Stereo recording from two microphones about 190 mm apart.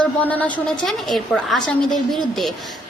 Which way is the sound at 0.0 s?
10° left (ahead or behind).